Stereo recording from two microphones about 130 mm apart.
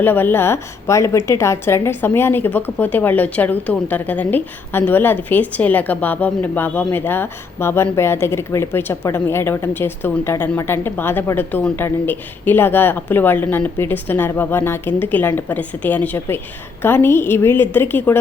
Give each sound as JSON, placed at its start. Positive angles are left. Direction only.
{"t": 0.0, "sound": "a woman's voice", "side_deg": 15}